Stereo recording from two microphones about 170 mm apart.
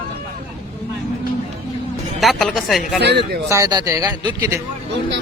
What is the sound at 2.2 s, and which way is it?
Speech, centre (ahead or behind).